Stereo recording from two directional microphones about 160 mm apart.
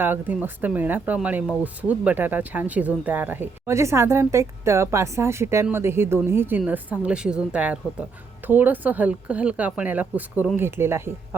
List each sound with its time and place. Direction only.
0.0 s speech: 10° right (ahead or behind)